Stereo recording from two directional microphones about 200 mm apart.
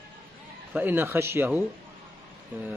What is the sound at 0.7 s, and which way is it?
A man's voice, 10° right (ahead or behind).